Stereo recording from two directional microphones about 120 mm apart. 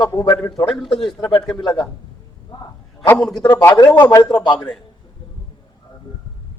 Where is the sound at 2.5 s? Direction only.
40° left (ahead or behind).